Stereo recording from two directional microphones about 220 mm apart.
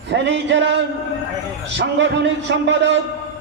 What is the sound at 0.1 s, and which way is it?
A man's voice, 55° right (ahead or behind).